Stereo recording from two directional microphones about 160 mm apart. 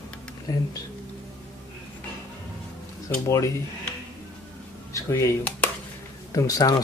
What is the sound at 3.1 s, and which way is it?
Speech, 20° left (ahead or behind).